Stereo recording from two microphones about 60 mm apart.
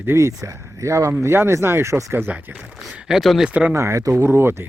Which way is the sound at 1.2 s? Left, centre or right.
Right.